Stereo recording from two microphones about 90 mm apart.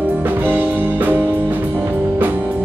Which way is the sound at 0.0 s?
20° right (ahead or behind).